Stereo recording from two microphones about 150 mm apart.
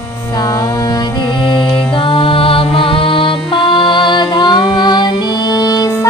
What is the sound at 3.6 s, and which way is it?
Music, 35° left (ahead or behind).